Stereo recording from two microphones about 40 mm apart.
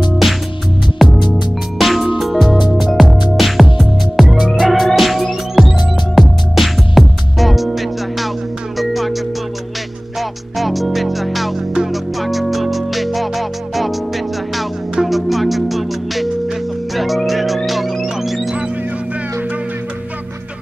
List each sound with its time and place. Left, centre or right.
0.9 s music: centre
10.6 s music: centre